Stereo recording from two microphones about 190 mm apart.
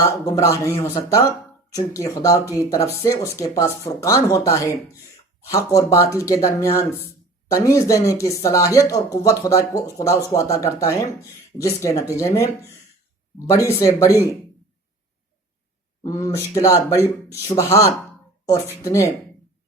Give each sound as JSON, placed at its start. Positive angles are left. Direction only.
{"t": 0.1, "sound": "speech", "side_deg": 15}
{"t": 13.5, "sound": "speech", "side_deg": 15}
{"t": 16.0, "sound": "speech", "side_deg": 15}